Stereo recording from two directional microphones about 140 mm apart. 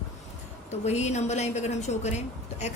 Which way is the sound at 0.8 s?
55° left (ahead or behind).